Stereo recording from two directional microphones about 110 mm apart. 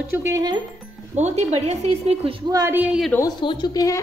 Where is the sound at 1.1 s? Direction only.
80° right.